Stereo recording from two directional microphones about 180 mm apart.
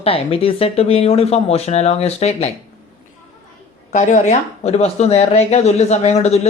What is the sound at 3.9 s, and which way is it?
Speech, 40° left (ahead or behind).